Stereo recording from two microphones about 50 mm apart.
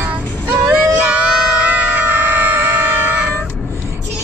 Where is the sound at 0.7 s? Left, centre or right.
Right.